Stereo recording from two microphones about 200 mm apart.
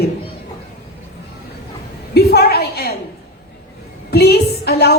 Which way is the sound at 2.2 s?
50° left (ahead or behind).